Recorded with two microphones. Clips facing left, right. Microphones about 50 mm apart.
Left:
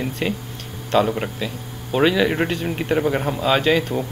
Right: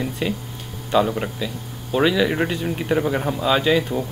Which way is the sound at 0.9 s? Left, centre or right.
Centre.